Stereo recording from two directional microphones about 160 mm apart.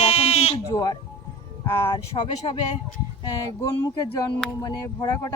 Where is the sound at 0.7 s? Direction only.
20° left (ahead or behind).